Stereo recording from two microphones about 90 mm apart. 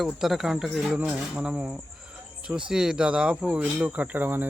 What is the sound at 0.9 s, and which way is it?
Speech, 15° right (ahead or behind).